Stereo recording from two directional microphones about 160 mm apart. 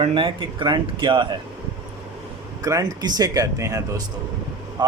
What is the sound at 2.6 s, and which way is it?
Speech, 20° right (ahead or behind).